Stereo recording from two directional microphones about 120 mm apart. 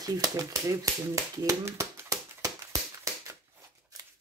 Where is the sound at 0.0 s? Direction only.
30° right (ahead or behind).